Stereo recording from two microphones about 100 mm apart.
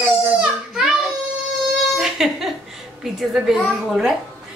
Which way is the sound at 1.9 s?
5° right (ahead or behind).